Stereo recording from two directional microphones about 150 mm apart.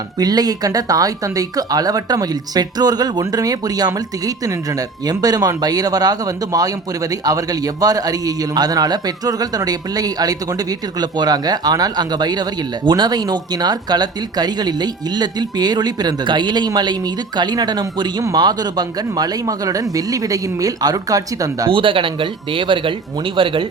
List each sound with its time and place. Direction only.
0.2 s speech: 25° right (ahead or behind)
21.7 s speech: 35° right (ahead or behind)